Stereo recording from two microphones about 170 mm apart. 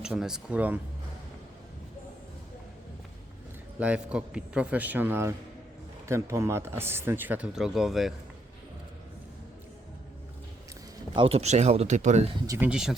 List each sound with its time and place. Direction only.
0.0 s speech: 5° right (ahead or behind)
3.8 s speech: 5° right (ahead or behind)
11.1 s speech: 35° right (ahead or behind)
12.5 s speech: 10° right (ahead or behind)